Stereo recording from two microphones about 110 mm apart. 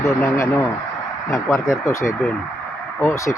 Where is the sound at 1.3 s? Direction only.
25° left (ahead or behind).